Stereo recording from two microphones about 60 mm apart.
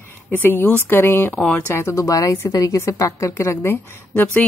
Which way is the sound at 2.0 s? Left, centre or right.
Left.